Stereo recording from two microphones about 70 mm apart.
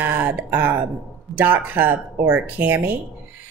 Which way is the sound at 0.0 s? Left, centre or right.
Right.